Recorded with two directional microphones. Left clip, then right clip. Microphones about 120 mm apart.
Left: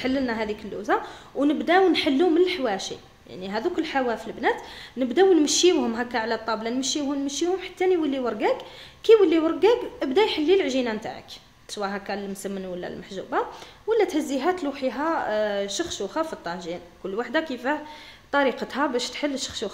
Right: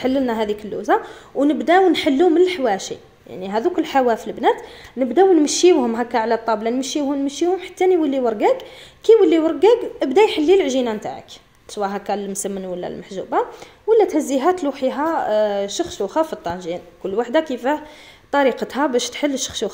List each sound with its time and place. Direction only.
0.0 s a woman's voice: 40° right (ahead or behind)
7.6 s a woman's voice: 35° right (ahead or behind)